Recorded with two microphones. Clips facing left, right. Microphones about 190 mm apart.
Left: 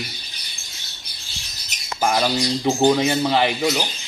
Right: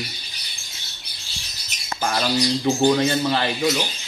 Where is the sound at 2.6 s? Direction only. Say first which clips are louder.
Left 2 dB; 15° left (ahead or behind).